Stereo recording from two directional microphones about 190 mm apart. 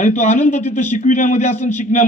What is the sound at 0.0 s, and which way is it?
A man's voice, 40° left (ahead or behind).